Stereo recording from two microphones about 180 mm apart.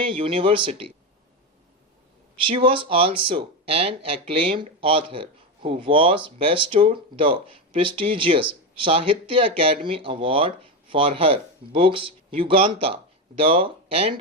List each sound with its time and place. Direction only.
0.0 s speech: 30° right (ahead or behind)
2.4 s speech: 30° right (ahead or behind)